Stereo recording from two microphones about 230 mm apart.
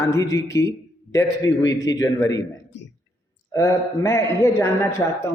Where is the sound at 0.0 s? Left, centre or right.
Centre.